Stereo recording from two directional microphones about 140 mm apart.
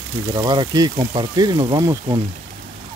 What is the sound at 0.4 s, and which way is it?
Speech, 30° right (ahead or behind).